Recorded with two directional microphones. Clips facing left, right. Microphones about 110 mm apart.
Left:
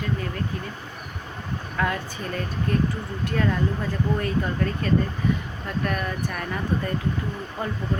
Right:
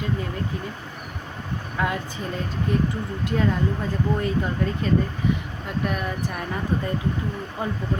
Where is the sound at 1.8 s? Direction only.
20° right (ahead or behind).